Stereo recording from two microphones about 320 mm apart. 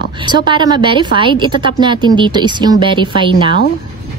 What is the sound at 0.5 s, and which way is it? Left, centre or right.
A woman's voice, centre.